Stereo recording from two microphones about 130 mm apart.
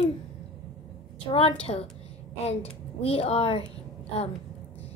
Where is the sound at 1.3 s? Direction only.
45° left (ahead or behind).